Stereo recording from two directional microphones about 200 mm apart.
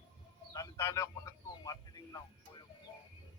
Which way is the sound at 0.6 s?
15° left (ahead or behind).